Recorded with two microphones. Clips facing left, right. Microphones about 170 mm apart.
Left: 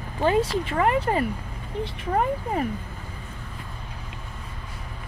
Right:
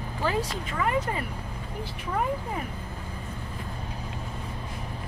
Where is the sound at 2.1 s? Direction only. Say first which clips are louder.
Left 4 dB; 50° left (ahead or behind).